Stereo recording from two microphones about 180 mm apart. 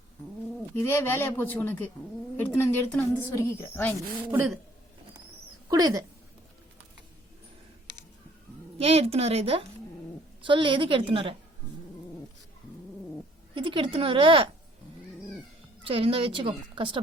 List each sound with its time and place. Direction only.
0.8 s speech: 10° left (ahead or behind)
4.3 s speech: 15° right (ahead or behind)
5.6 s speech: 20° right (ahead or behind)
8.8 s a woman's voice: 35° right (ahead or behind)
13.5 s a woman's voice: 30° right (ahead or behind)
15.8 s a woman's voice: 30° right (ahead or behind)